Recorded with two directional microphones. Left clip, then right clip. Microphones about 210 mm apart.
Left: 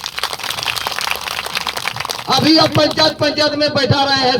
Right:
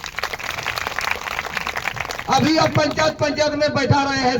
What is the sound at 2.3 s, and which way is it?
A man's voice, 45° left (ahead or behind).